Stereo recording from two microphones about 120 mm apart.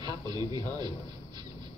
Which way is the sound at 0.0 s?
35° right (ahead or behind).